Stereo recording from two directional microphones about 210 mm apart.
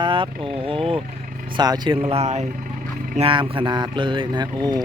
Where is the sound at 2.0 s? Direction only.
30° right (ahead or behind).